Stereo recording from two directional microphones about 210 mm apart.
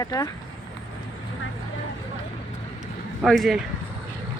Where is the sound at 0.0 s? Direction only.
15° left (ahead or behind).